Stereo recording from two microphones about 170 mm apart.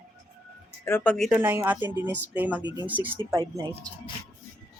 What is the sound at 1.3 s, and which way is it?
Speech, 10° right (ahead or behind).